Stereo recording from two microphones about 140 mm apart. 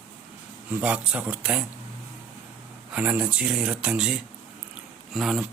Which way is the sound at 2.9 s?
10° right (ahead or behind).